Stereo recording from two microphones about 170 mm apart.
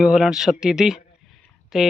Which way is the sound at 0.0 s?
5° right (ahead or behind).